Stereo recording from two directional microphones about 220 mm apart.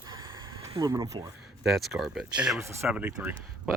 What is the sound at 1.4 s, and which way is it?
Speech, centre (ahead or behind).